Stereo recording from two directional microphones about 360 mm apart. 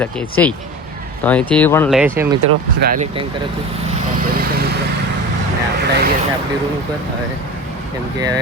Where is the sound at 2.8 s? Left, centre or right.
Right.